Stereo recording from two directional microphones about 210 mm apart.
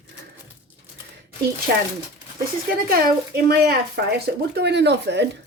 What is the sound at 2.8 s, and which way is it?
Speech, 45° right (ahead or behind).